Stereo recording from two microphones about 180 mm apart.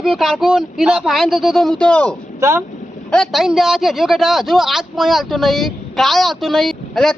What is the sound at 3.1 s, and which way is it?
A man's voice, centre (ahead or behind).